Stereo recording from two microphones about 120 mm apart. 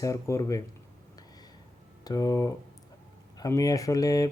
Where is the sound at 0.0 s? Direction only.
25° left (ahead or behind).